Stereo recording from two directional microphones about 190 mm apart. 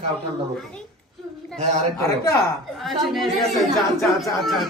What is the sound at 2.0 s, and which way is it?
Speech, 20° left (ahead or behind).